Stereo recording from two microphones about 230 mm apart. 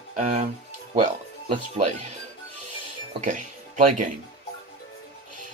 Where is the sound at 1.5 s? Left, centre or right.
Right.